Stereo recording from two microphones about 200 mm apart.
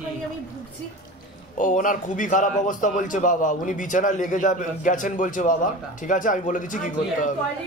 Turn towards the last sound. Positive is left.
turn(degrees=40)  # may be behind; listen again after turning